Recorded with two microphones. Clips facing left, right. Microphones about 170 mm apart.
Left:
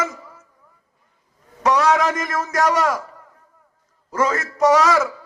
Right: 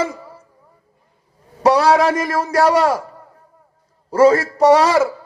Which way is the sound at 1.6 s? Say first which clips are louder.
Right 4 dB; 35° right (ahead or behind).